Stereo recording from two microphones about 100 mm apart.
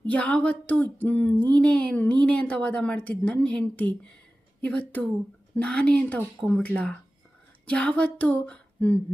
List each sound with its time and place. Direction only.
0.1 s a woman's voice: 10° left (ahead or behind)